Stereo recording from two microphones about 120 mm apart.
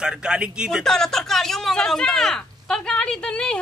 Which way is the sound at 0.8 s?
5° left (ahead or behind).